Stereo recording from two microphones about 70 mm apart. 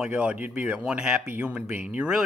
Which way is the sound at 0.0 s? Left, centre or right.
Centre.